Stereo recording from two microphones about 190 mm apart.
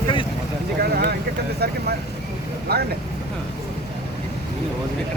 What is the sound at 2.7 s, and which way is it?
Speech, 55° right (ahead or behind).